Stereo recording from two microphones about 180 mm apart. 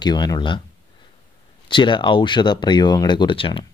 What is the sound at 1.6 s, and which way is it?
Speech, 25° left (ahead or behind).